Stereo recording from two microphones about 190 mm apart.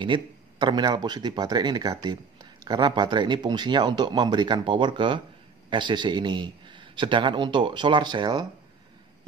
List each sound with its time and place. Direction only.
0.0 s a man's voice: 25° right (ahead or behind)